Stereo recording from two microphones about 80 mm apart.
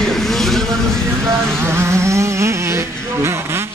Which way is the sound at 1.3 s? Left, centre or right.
Right.